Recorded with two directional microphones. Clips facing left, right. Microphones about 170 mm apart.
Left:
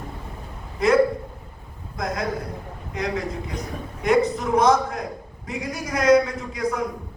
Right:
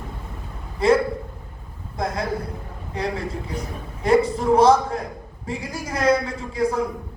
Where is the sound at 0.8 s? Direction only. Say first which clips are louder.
Right 2 dB; 30° right (ahead or behind).